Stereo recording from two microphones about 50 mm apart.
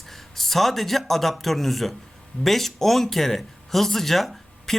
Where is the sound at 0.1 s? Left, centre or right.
Centre.